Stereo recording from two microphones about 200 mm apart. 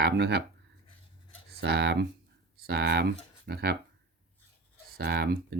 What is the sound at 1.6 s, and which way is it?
Speech, 55° right (ahead or behind).